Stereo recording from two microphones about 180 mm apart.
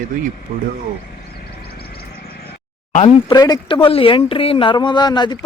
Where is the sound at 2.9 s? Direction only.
30° left (ahead or behind).